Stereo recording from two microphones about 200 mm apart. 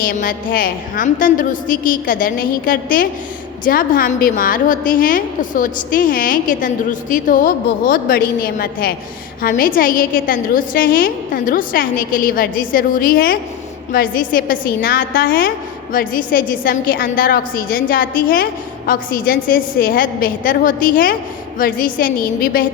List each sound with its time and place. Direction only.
0.0 s a woman's voice: 45° left (ahead or behind)